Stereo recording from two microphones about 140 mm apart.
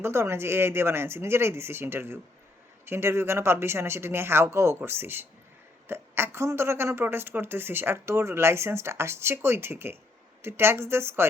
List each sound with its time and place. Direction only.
0.0 s speech: 20° right (ahead or behind)